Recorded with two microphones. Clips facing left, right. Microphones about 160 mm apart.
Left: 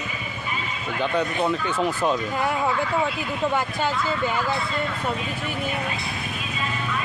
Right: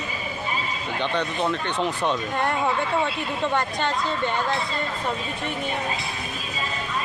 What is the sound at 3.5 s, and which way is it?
Speech, 5° left (ahead or behind).